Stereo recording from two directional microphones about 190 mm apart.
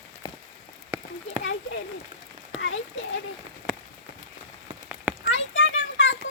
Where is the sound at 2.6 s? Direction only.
85° left.